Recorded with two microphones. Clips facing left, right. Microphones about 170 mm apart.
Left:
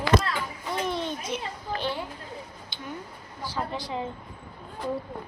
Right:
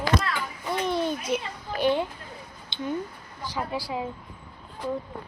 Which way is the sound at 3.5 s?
10° right (ahead or behind).